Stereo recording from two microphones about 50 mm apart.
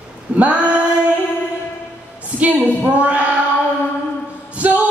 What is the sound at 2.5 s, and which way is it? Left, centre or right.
Speech, right.